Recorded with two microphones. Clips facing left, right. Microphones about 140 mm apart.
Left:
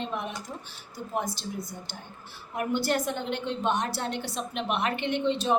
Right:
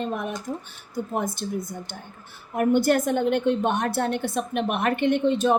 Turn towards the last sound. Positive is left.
turn(degrees=-50)  # may be behind; listen again after turning